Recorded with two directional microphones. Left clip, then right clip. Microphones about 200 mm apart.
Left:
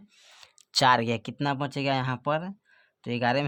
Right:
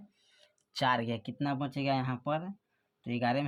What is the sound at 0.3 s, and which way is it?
Speech, 50° left (ahead or behind).